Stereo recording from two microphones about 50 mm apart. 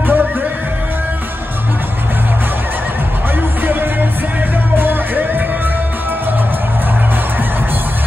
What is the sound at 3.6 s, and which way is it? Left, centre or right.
Music, right.